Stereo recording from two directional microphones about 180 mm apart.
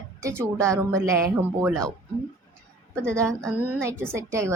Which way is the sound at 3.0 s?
5° left (ahead or behind).